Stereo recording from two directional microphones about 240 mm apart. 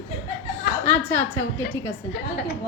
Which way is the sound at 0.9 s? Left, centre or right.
Centre.